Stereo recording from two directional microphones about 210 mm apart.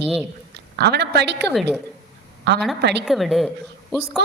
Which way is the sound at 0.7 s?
50° right (ahead or behind).